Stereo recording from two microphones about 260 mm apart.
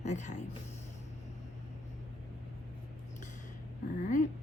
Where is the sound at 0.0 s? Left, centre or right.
Left.